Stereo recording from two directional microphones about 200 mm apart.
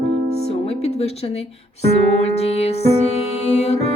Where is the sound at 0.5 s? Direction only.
30° left (ahead or behind).